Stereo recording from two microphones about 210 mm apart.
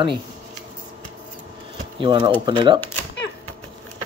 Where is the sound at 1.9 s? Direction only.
20° right (ahead or behind).